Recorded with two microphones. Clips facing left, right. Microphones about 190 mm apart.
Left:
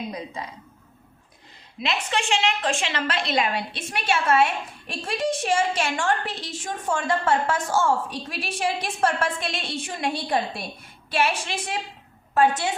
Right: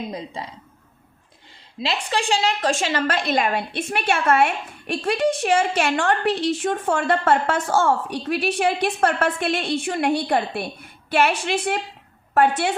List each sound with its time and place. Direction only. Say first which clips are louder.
1.8 s a woman's voice: right 2 dB; 35° right (ahead or behind); by 12.7 s 60° right (ahead or behind)